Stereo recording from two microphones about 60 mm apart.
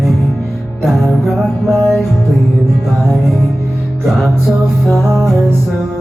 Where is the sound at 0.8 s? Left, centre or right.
Centre.